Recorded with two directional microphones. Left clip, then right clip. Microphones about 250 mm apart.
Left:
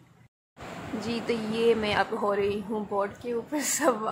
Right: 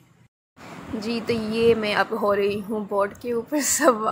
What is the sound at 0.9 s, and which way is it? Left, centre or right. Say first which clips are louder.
A woman's voice: right 4 dB; centre.